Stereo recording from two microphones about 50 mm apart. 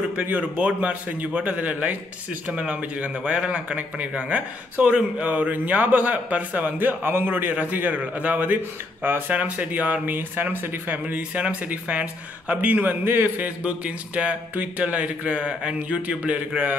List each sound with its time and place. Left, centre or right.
0.4 s a man's voice: right
13.4 s speech: right